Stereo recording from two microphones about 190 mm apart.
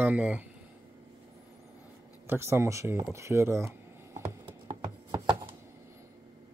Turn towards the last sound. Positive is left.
turn(degrees=-20)  # may be behind; listen again after turning